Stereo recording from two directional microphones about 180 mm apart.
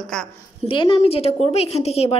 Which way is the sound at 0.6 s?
30° left (ahead or behind).